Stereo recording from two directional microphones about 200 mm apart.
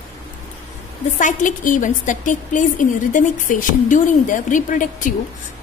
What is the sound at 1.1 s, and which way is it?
A woman's voice, 40° left (ahead or behind).